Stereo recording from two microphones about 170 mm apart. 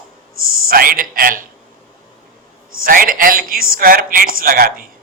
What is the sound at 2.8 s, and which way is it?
A man's voice, 55° right (ahead or behind).